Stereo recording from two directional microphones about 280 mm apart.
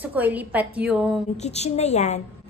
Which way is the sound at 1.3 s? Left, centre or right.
Left.